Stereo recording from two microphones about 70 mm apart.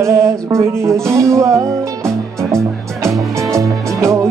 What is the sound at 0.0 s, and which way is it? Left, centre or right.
Music, right.